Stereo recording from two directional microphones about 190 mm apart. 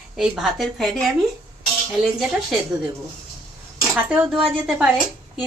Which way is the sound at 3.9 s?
10° right (ahead or behind).